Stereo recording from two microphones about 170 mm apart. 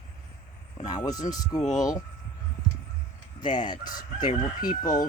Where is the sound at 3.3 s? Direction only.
25° left (ahead or behind).